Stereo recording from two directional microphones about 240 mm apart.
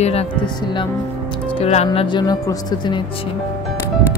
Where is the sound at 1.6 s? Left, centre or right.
Left.